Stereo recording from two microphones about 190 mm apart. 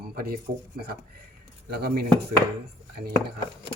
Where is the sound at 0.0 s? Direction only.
55° right (ahead or behind).